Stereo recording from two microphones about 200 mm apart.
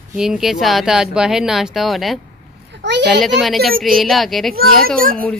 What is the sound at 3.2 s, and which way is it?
Speech, centre (ahead or behind).